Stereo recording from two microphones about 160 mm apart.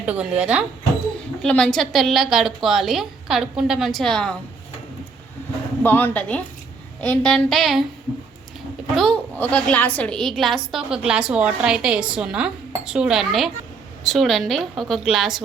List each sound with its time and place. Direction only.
0.0 s speech: 5° right (ahead or behind)
1.4 s a woman's voice: 5° left (ahead or behind)
5.8 s a woman's voice: 10° left (ahead or behind)
9.0 s a woman's voice: 5° left (ahead or behind)